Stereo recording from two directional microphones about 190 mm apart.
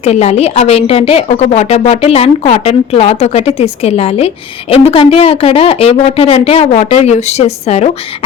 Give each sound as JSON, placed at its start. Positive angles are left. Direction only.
{"t": 0.0, "sound": "a woman's voice", "side_deg": 35}